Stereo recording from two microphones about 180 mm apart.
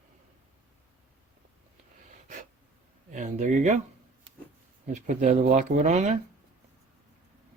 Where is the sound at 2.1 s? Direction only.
45° right (ahead or behind).